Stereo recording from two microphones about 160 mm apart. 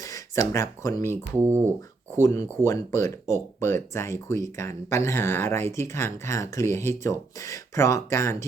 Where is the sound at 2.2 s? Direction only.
20° left (ahead or behind).